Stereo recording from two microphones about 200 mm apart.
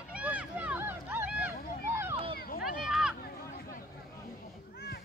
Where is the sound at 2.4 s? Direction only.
50° left (ahead or behind).